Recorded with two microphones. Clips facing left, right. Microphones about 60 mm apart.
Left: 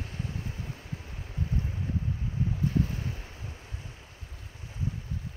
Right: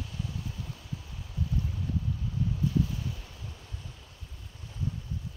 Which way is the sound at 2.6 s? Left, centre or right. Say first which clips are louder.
Even; left.